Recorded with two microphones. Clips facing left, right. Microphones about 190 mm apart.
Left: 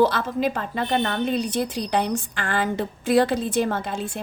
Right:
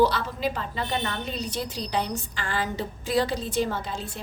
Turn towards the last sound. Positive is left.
turn(degrees=55)  # may be behind; listen again after turning